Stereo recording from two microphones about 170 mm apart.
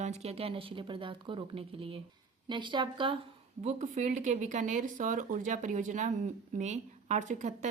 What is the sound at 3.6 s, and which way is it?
Speech, 40° right (ahead or behind).